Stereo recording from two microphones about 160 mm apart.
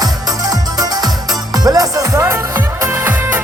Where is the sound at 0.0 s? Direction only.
25° right (ahead or behind).